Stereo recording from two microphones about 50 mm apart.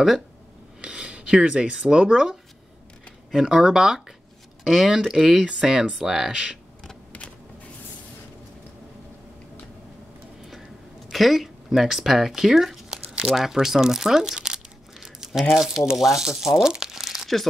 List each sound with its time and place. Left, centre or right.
0.7 s speech: right; by 5.4 s centre
5.4 s speech: centre
11.1 s speech: centre
13.3 s crumpling: centre
15.6 s speech: centre